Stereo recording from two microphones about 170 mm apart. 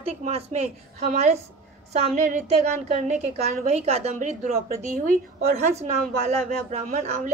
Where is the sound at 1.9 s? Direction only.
45° right (ahead or behind).